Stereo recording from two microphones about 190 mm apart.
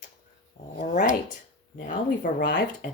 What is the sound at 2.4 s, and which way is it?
Speech, 65° left (ahead or behind).